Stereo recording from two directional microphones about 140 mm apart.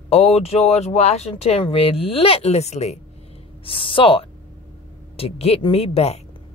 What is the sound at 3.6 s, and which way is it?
A woman's voice, 40° left (ahead or behind).